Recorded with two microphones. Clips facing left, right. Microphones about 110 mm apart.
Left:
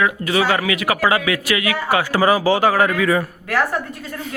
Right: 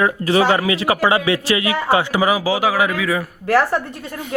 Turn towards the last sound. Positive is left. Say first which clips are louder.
# right 1 dB
turn(degrees=-30)  # may be behind; listen again after turning